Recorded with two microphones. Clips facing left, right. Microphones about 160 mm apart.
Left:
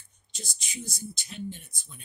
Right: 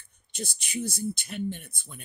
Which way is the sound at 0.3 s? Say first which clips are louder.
Right 9 dB; 55° right (ahead or behind).